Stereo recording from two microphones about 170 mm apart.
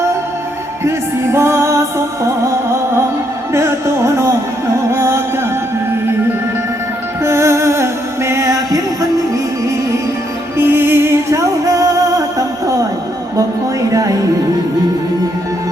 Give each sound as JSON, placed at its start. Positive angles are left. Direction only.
{"t": 0.9, "sound": "music", "side_deg": -15}
{"t": 3.5, "sound": "music", "side_deg": -15}
{"t": 7.3, "sound": "music", "side_deg": -15}
{"t": 10.6, "sound": "music", "side_deg": -15}
{"t": 13.9, "sound": "music", "side_deg": -20}